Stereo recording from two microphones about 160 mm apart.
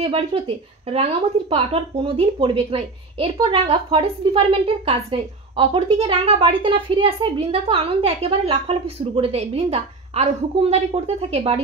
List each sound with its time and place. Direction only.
0.0 s a woman's voice: 35° right (ahead or behind)